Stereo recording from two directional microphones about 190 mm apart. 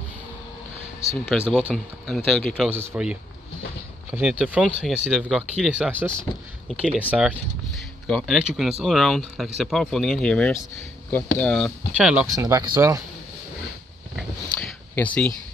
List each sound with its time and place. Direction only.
1.1 s speech: centre (ahead or behind)
12.4 s speech: 20° right (ahead or behind)
14.1 s a sound: 5° left (ahead or behind)